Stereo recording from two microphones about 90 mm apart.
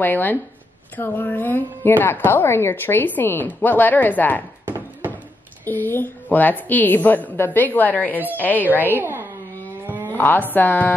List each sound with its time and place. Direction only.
0.0 s a woman's voice: 20° left (ahead or behind)
4.6 s a sound: 20° right (ahead or behind)
5.7 s a woman's voice: 20° left (ahead or behind)
8.9 s speech: 25° right (ahead or behind)
9.8 s a sound: 25° right (ahead or behind)
10.1 s a woman's voice: 20° left (ahead or behind)